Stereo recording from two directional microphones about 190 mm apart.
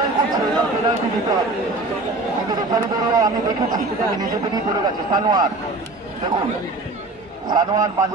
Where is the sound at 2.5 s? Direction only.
20° right (ahead or behind).